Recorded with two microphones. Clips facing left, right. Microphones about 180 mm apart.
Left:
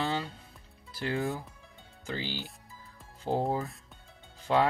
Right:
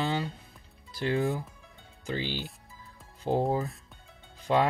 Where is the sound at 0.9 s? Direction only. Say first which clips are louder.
Right 4 dB; 20° right (ahead or behind).